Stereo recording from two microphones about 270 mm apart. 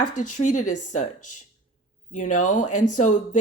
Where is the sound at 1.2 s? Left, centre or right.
Left.